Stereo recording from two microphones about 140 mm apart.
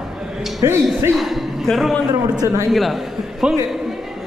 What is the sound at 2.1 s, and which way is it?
Speech, 25° right (ahead or behind).